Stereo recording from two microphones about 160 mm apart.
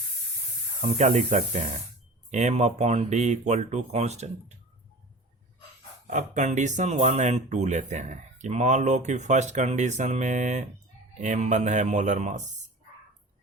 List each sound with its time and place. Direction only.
0.8 s speech: 50° right (ahead or behind)
6.1 s speech: 50° right (ahead or behind)